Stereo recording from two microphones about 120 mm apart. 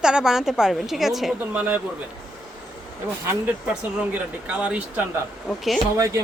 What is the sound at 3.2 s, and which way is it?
A woman's voice, 10° right (ahead or behind).